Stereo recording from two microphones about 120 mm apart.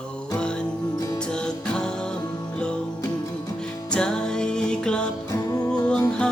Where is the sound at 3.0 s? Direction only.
30° left (ahead or behind).